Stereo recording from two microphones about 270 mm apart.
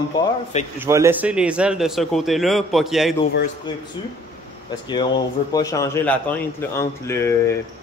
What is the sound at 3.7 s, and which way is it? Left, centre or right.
A man's voice, centre.